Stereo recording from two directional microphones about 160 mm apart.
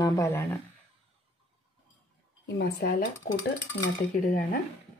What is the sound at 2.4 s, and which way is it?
Speech, 70° left (ahead or behind).